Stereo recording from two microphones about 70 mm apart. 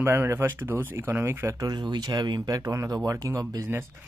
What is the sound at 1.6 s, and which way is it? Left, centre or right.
Speech, right.